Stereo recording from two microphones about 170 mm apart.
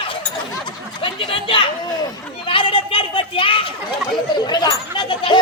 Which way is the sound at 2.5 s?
30° left (ahead or behind).